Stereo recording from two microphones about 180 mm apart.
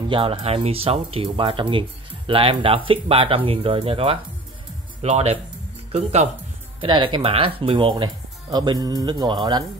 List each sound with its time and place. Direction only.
0.1 s speech: 30° right (ahead or behind)
6.8 s speech: 25° right (ahead or behind)